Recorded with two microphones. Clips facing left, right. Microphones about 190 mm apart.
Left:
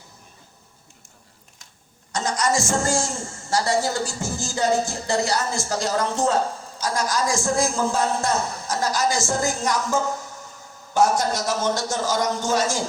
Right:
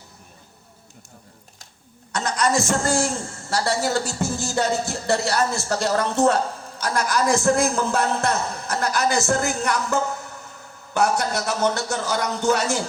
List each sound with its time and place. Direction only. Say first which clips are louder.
2.1 s a man's voice: right 1 dB; 60° right (ahead or behind)